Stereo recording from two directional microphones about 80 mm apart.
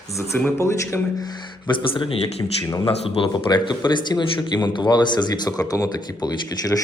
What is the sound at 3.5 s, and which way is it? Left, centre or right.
Speech, left.